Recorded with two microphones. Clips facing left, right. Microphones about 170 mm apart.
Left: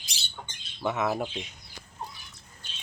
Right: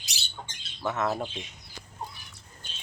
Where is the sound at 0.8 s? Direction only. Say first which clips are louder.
Left 1 dB; 10° left (ahead or behind).